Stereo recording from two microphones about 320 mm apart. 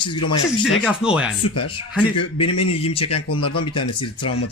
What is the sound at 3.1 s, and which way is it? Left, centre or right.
Speech, left.